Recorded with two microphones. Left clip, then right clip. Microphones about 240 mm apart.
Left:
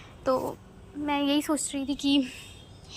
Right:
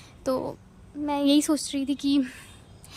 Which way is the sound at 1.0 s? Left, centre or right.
Right.